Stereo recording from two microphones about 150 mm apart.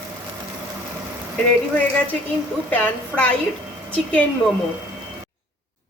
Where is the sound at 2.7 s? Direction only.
10° left (ahead or behind).